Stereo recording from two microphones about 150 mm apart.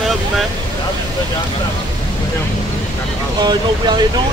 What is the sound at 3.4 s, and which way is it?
Speech, 30° right (ahead or behind).